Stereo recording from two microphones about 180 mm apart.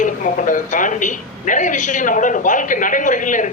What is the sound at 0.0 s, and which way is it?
A woman's voice, 45° left (ahead or behind).